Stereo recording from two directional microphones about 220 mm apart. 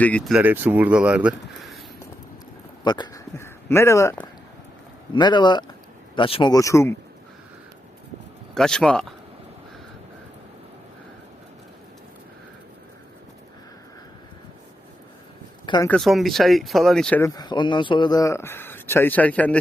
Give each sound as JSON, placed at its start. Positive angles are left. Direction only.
{"t": 0.0, "sound": "speech", "side_deg": 5}
{"t": 2.8, "sound": "speech", "side_deg": 20}
{"t": 8.5, "sound": "speech", "side_deg": 5}
{"t": 15.6, "sound": "speech", "side_deg": 20}
{"t": 15.9, "sound": "speech", "side_deg": 0}